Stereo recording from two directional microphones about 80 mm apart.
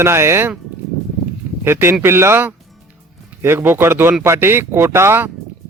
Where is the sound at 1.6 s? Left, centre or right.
Right.